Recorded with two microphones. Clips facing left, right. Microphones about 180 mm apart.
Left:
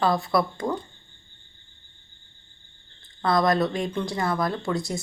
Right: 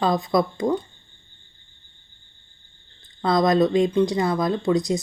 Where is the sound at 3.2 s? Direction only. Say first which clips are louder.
Right 3 dB; 20° right (ahead or behind).